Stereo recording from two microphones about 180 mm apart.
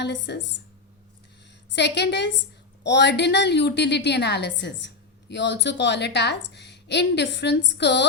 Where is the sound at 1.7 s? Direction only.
70° left (ahead or behind).